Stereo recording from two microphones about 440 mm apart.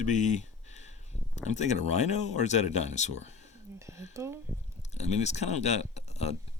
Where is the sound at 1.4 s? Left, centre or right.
Centre.